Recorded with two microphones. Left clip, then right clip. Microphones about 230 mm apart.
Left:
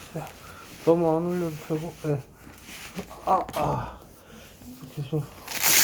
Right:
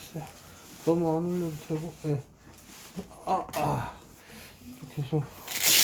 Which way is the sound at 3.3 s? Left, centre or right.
Right.